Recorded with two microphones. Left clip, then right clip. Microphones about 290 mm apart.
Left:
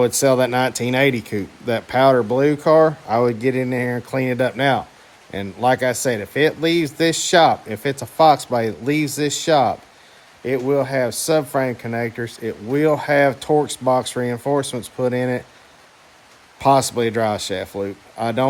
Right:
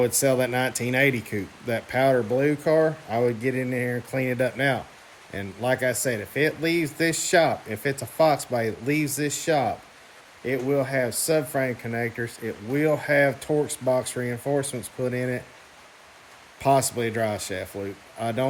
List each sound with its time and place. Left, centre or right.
0.0 s speech: centre
16.6 s speech: centre